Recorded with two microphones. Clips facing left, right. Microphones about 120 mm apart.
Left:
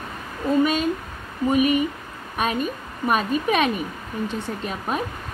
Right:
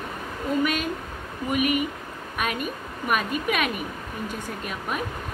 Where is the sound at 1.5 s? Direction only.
30° left (ahead or behind).